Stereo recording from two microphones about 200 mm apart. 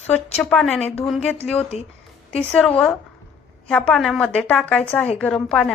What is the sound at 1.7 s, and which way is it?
Speech, 30° left (ahead or behind).